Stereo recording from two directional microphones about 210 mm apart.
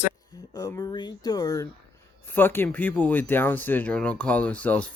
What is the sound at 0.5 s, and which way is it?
Speech, 15° left (ahead or behind).